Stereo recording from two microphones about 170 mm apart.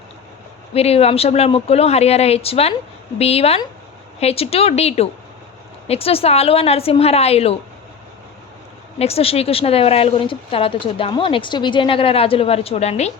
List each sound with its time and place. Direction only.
0.7 s a woman's voice: 35° left (ahead or behind)
9.0 s a woman's voice: 35° left (ahead or behind)